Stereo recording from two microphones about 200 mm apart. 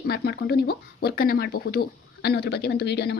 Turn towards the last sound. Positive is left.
turn(degrees=55)  # may be behind; listen again after turning